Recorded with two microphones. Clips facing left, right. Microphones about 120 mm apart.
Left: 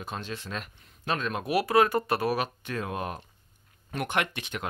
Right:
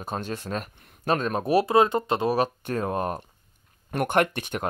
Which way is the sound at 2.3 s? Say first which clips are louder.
Right 6 dB; 40° right (ahead or behind).